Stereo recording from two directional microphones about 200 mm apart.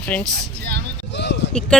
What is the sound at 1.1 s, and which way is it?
Speech, 60° left (ahead or behind).